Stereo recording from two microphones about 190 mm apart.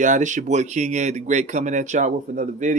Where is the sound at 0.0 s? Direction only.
40° right (ahead or behind).